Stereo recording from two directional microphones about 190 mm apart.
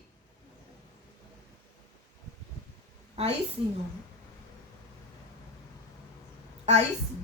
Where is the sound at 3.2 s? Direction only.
35° right (ahead or behind).